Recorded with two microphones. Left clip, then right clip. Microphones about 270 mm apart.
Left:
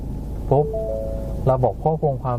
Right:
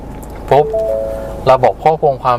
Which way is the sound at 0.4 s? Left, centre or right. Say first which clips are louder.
Right 9 dB; right.